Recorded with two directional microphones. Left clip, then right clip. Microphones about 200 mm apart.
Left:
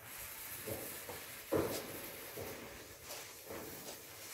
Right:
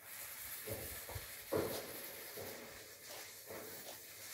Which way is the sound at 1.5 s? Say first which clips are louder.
Left 3 dB; centre (ahead or behind).